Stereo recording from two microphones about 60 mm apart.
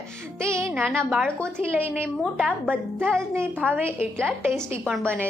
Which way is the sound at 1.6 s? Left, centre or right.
Right.